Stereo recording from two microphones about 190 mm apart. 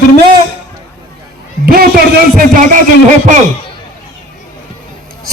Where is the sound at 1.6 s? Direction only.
50° right (ahead or behind).